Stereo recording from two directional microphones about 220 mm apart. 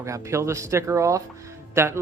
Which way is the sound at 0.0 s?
15° right (ahead or behind).